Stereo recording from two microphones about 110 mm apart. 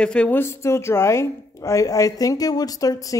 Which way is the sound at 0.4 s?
25° left (ahead or behind).